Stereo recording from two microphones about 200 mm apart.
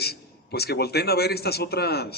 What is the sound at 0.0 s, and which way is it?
A man's voice, 55° left (ahead or behind).